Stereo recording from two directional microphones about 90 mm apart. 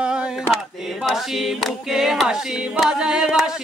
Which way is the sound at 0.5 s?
5° right (ahead or behind).